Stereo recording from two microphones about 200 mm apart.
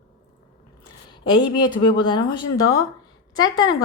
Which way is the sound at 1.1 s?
20° left (ahead or behind).